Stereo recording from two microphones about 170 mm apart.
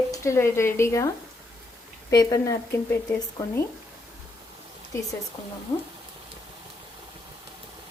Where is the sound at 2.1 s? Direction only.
20° left (ahead or behind).